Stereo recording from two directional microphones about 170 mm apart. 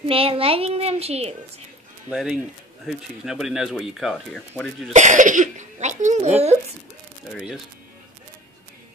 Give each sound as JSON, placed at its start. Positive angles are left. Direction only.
{"t": 0.1, "sound": "a child's voice", "side_deg": -35}
{"t": 2.0, "sound": "speech", "side_deg": 0}
{"t": 4.9, "sound": "speech", "side_deg": -45}
{"t": 7.3, "sound": "speech", "side_deg": 0}